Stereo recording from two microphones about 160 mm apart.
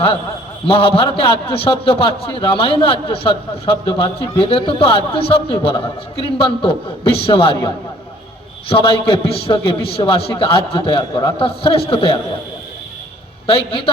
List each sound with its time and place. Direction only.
0.7 s a man's voice: 35° left (ahead or behind)
8.7 s a man's voice: 35° left (ahead or behind)
13.5 s a man's voice: 35° left (ahead or behind)